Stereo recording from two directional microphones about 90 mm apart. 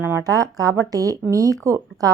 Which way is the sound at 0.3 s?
40° right (ahead or behind).